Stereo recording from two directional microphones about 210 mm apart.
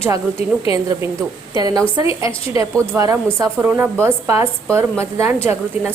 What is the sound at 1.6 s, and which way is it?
A woman's voice, 20° right (ahead or behind).